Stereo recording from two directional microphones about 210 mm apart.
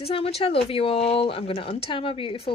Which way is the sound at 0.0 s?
30° left (ahead or behind).